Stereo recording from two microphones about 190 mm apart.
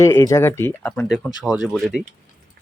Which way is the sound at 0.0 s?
15° left (ahead or behind).